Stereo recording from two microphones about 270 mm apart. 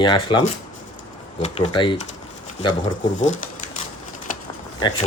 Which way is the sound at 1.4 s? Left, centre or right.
Left.